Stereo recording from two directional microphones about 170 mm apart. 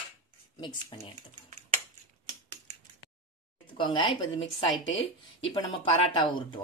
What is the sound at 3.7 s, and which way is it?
Speech, 30° left (ahead or behind).